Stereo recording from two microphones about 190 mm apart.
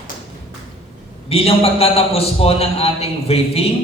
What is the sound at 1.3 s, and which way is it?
A man's voice, 30° left (ahead or behind).